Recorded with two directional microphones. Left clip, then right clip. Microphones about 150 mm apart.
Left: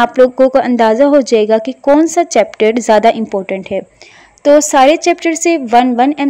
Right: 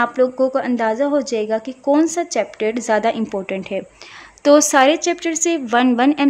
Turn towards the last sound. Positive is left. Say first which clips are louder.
# left 5 dB
turn(degrees=20)  # may be behind; listen again after turning